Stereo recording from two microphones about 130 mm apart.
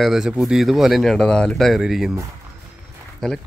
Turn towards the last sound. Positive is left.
turn(degrees=5)  # may be behind; listen again after turning